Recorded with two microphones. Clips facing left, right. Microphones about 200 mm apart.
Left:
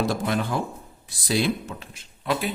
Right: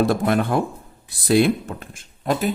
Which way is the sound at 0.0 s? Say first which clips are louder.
Right 6 dB; 55° right (ahead or behind).